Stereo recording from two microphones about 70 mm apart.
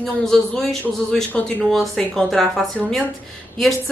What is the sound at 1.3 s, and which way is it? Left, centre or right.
Speech, left.